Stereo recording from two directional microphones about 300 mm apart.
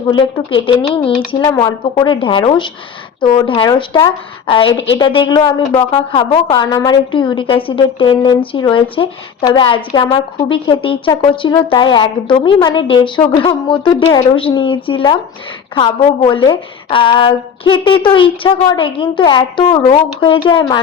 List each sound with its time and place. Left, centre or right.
0.1 s a woman's voice: centre